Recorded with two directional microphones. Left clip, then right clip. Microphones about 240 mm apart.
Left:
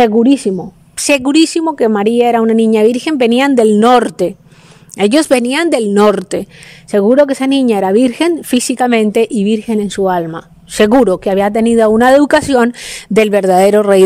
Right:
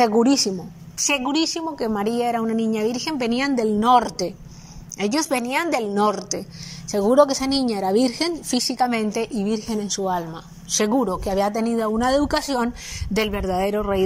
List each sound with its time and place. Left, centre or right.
0.1 s speech: left
1.0 s a woman's voice: left
5.1 s a woman's voice: left
6.9 s speech: left
7.2 s a woman's voice: left
7.7 s speech: left